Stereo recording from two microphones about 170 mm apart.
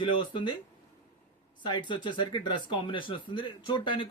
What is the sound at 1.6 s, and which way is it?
Speech, 25° left (ahead or behind).